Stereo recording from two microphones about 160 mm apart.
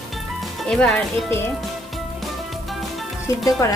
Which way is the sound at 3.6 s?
20° left (ahead or behind).